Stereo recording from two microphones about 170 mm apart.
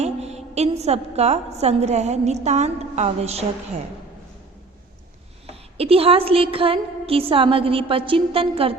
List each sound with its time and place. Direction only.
0.0 s a woman's voice: 40° right (ahead or behind)
5.5 s a woman's voice: 35° right (ahead or behind)